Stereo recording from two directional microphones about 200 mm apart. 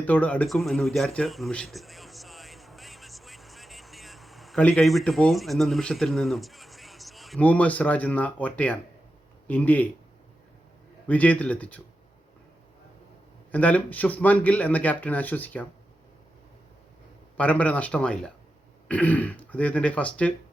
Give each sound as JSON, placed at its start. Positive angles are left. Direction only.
{"t": 0.0, "sound": "speech", "side_deg": 10}
{"t": 11.1, "sound": "speech", "side_deg": 5}
{"t": 13.5, "sound": "speech", "side_deg": 5}
{"t": 17.3, "sound": "speech", "side_deg": 5}